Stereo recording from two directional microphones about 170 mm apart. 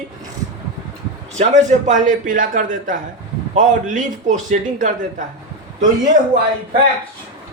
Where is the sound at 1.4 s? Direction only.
45° right (ahead or behind).